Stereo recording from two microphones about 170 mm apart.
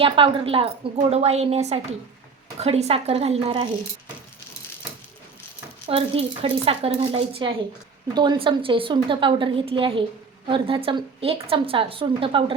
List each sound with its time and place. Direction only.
0.0 s a woman's voice: 30° right (ahead or behind)
5.9 s a woman's voice: 30° right (ahead or behind)